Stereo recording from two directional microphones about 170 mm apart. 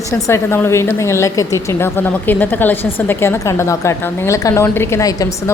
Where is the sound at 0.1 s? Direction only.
15° left (ahead or behind).